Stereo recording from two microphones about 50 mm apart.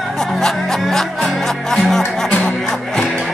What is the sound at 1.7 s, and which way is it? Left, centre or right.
Music, centre.